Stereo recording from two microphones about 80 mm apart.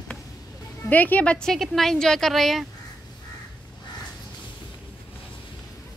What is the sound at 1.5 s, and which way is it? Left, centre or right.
Speech, centre.